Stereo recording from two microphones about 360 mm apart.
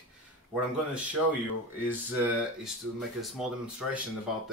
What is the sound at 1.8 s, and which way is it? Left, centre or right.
Speech, centre.